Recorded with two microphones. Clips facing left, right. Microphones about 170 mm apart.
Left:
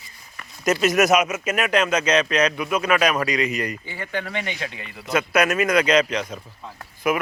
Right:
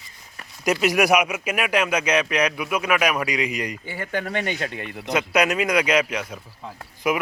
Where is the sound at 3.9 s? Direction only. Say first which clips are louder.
Right 2 dB; 50° right (ahead or behind).